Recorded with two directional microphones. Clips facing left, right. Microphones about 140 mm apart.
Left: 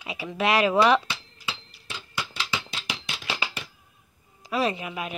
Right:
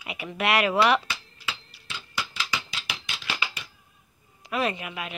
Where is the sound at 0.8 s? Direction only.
5° right (ahead or behind).